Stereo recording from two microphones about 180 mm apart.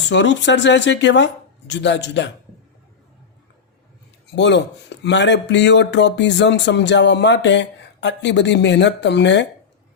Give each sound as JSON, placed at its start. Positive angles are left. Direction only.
{"t": 0.1, "sound": "speech", "side_deg": 80}
{"t": 4.4, "sound": "speech", "side_deg": 75}